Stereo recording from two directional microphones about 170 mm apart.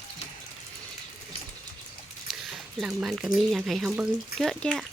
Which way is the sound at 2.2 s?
Centre (ahead or behind).